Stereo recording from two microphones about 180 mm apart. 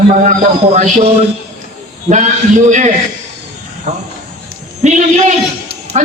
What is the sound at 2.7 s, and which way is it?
Speech, 45° right (ahead or behind).